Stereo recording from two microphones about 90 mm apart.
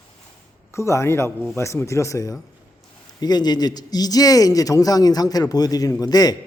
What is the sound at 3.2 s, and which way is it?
A man's voice, 50° left (ahead or behind).